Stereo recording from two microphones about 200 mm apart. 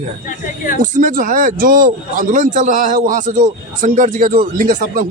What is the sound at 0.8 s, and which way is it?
A man's voice, 40° right (ahead or behind).